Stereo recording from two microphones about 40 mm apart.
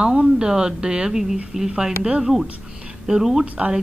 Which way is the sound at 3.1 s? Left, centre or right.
Centre.